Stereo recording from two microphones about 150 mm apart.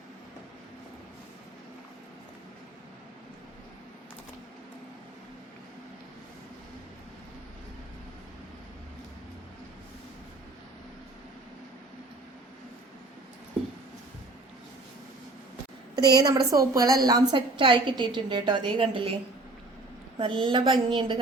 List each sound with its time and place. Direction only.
16.0 s a woman's voice: 25° right (ahead or behind)
17.1 s a woman's voice: 35° right (ahead or behind)
20.1 s a woman's voice: 35° right (ahead or behind)